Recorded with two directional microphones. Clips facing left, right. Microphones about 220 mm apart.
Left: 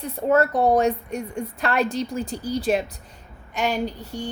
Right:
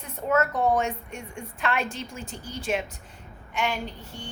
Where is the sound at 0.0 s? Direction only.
35° left (ahead or behind).